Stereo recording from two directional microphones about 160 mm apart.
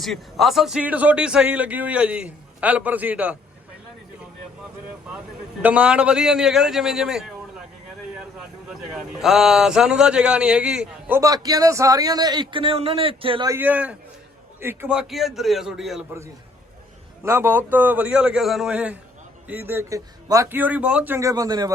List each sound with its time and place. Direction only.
0.0 s speech: centre (ahead or behind)
5.6 s a man's voice: 5° right (ahead or behind)
9.0 s a man's voice: 5° right (ahead or behind)
11.2 s a man's voice: 25° right (ahead or behind)
13.5 s a man's voice: 10° right (ahead or behind)
17.2 s a man's voice: 15° right (ahead or behind)